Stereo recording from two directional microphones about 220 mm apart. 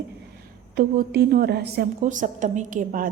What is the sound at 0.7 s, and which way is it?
A woman's voice, 45° right (ahead or behind).